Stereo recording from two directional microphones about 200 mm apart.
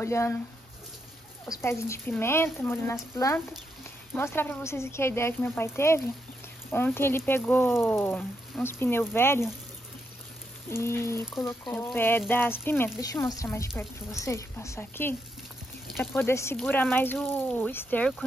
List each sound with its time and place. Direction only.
0.0 s speech: 15° left (ahead or behind)
1.5 s speech: 15° left (ahead or behind)
10.7 s speech: 10° left (ahead or behind)
15.9 s speech: centre (ahead or behind)
16.2 s speech: 10° left (ahead or behind)